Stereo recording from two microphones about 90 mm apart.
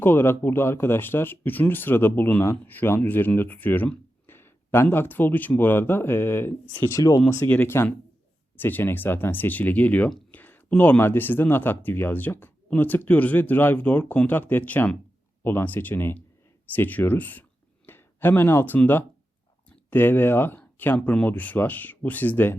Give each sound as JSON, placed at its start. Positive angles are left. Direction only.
{"t": 0.0, "sound": "speech", "side_deg": 25}
{"t": 7.5, "sound": "speech", "side_deg": 25}